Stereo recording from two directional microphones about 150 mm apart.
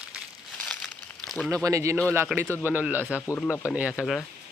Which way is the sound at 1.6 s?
20° right (ahead or behind).